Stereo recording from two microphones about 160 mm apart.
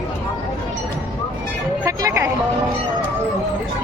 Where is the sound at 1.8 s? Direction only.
20° right (ahead or behind).